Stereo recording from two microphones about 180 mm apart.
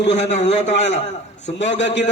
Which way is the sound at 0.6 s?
40° left (ahead or behind).